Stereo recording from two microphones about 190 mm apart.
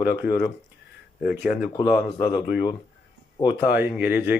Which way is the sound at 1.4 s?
5° right (ahead or behind).